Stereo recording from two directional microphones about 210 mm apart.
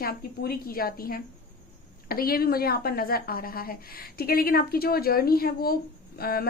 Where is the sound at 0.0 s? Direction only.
45° left (ahead or behind).